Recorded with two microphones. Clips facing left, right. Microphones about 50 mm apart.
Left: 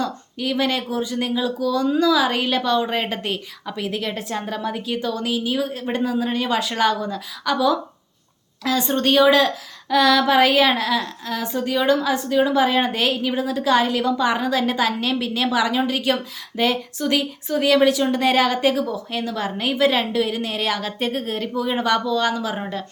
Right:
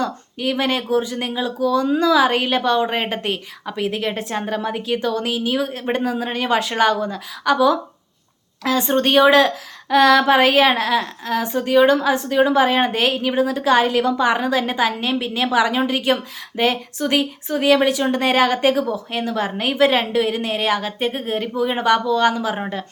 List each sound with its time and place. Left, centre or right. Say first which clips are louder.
0.0 s a woman's voice: right 2 dB; right
22.5 s a woman's voice: right 2 dB; right